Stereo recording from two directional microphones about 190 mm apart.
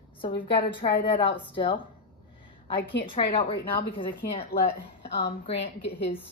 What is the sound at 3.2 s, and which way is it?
Speech, 30° left (ahead or behind).